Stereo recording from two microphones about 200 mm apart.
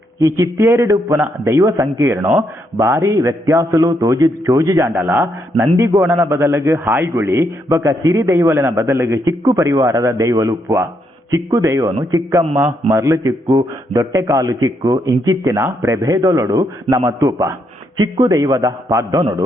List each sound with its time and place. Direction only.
0.2 s a man's voice: 15° right (ahead or behind)